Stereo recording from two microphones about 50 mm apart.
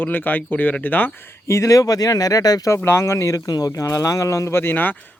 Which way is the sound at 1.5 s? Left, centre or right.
Left.